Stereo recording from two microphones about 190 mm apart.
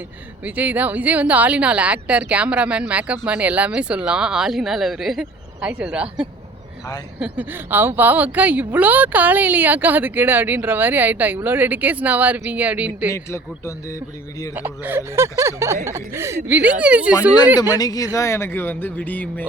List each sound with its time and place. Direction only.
0.4 s a woman's voice: 10° right (ahead or behind)
13.1 s a man's voice: 15° left (ahead or behind)
14.5 s a woman's voice: 10° right (ahead or behind)
17.7 s a man's voice: 20° left (ahead or behind)